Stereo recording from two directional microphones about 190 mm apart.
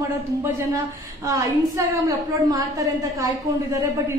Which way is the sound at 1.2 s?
15° right (ahead or behind).